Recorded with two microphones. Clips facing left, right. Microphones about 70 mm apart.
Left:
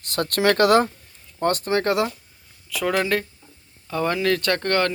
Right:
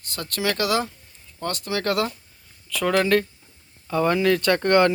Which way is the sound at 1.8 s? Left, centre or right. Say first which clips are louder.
Right 1 dB; left.